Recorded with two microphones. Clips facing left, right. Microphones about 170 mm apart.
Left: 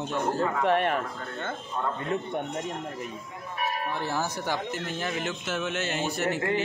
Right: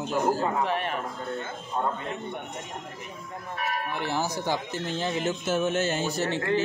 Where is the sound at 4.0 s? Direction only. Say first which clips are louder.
Right 1 dB; 20° right (ahead or behind).